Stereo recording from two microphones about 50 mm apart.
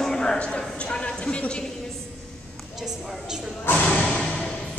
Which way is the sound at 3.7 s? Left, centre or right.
Left.